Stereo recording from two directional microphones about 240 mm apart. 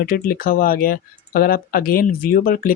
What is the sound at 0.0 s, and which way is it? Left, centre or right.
Speech, left.